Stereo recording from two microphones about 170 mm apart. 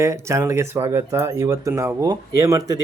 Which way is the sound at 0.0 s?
15° right (ahead or behind).